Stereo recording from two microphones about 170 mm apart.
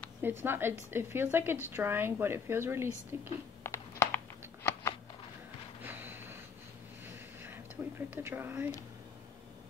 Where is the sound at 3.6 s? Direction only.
15° left (ahead or behind).